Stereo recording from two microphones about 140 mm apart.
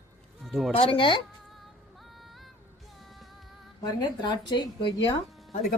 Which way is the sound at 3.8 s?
30° left (ahead or behind).